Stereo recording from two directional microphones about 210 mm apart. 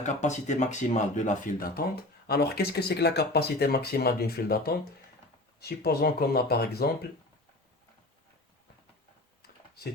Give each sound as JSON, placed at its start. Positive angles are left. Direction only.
{"t": 0.0, "sound": "speech", "side_deg": 35}